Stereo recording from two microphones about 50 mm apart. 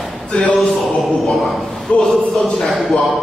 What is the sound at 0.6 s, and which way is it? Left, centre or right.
Speech, centre.